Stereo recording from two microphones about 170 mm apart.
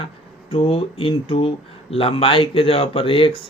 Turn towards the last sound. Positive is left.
turn(degrees=30)  # may be behind; listen again after turning